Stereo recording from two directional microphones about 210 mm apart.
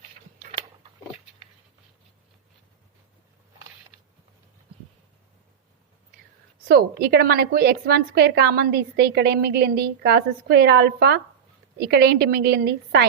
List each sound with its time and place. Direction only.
6.7 s a woman's voice: 50° right (ahead or behind)